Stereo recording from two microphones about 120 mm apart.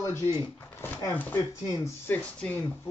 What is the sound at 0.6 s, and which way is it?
Speech, 20° left (ahead or behind).